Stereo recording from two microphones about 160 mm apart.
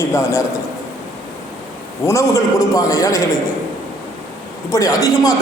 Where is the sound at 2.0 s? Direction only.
20° left (ahead or behind).